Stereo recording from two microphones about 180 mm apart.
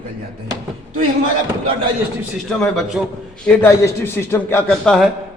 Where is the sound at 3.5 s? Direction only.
15° left (ahead or behind).